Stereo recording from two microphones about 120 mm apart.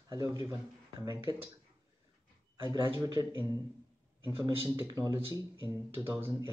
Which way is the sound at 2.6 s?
35° right (ahead or behind).